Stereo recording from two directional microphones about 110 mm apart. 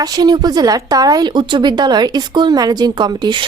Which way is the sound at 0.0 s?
35° right (ahead or behind).